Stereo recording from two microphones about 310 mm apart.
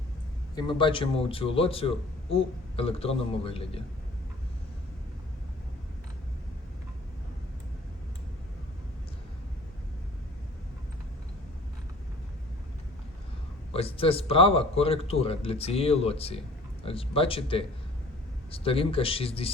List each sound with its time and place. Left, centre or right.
0.5 s a man's voice: centre
13.7 s a man's voice: centre